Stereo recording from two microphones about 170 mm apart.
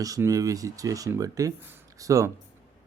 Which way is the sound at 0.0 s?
20° right (ahead or behind).